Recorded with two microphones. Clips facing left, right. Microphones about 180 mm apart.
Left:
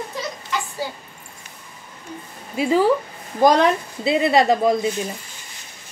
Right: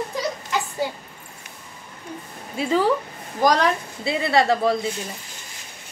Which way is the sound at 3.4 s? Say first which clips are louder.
Left 4 dB; 20° left (ahead or behind).